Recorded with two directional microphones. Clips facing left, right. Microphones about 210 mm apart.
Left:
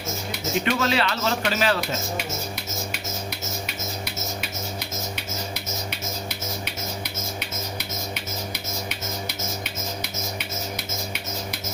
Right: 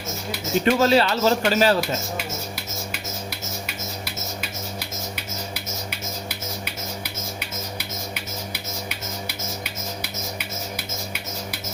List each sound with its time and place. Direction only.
0.6 s speech: 40° right (ahead or behind)